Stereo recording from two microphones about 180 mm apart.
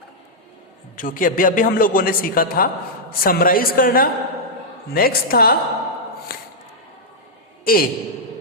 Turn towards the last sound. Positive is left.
turn(degrees=55)  # may be behind; listen again after turning